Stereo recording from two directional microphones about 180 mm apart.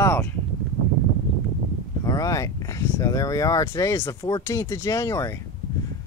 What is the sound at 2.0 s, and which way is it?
Speech, 20° left (ahead or behind).